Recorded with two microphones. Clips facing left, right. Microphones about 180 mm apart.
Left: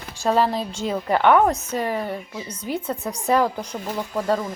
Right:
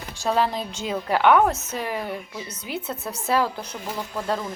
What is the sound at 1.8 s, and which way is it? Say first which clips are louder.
Speech: left 1 dB; 5° right (ahead or behind).